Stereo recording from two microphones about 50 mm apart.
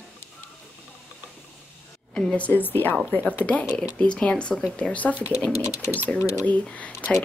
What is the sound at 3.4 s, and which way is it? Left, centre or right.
Speech, left.